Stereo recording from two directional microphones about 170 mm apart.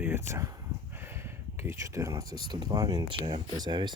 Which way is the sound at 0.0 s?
15° right (ahead or behind).